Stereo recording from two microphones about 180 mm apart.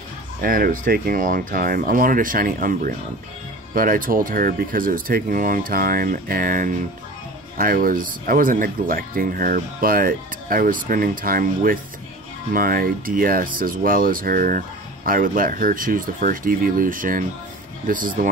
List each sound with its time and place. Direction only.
0.4 s speech: 55° right (ahead or behind)